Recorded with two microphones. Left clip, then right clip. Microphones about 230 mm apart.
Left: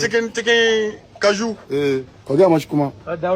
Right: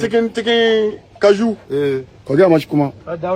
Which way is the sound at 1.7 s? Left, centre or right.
Left.